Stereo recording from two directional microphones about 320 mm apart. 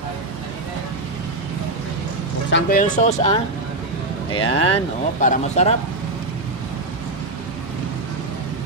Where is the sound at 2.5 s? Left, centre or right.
Left.